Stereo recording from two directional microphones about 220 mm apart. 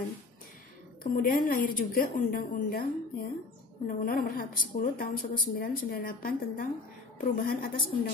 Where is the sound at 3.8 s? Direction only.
40° left (ahead or behind).